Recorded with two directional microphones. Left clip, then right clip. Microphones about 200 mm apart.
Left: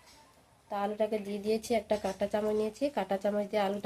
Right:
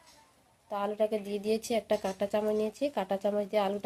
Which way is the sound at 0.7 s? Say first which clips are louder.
Right 1 dB; 35° right (ahead or behind).